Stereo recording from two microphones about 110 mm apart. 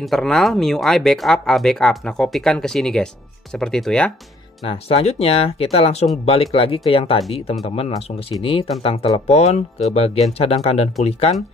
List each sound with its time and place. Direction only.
0.0 s speech: 5° left (ahead or behind)
4.6 s speech: 65° left (ahead or behind)
9.3 s speech: 80° left
9.9 s speech: 65° left (ahead or behind)